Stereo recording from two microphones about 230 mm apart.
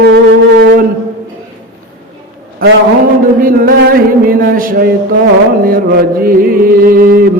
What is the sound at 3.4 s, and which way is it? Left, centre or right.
Mantra, right.